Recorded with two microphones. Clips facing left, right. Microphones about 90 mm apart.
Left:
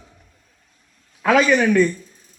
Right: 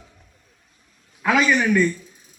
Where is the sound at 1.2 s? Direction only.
55° left (ahead or behind).